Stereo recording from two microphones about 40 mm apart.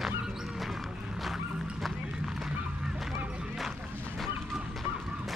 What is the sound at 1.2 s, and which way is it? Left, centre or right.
Music, centre.